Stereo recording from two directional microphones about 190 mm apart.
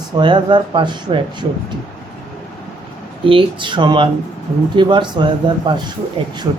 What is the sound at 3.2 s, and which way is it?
Speech, 25° right (ahead or behind).